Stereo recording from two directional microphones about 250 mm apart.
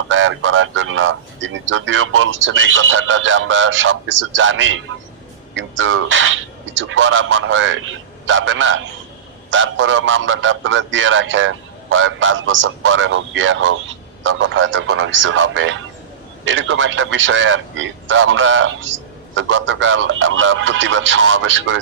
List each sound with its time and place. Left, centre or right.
0.1 s a man's voice: right